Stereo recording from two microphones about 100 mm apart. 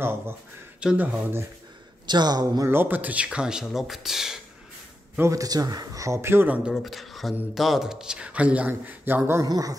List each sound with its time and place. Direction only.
0.7 s a man's voice: 10° right (ahead or behind)
2.0 s speech: 45° right (ahead or behind)
2.7 s a man's voice: 20° right (ahead or behind); by 4.4 s 5° right (ahead or behind)
5.3 s speech: 35° right (ahead or behind); by 6.7 s 15° right (ahead or behind)
6.7 s a man's voice: centre (ahead or behind); by 9.4 s 20° right (ahead or behind)
9.4 s speech: 35° right (ahead or behind)